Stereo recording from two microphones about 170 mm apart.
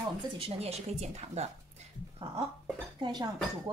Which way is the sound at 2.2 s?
30° right (ahead or behind).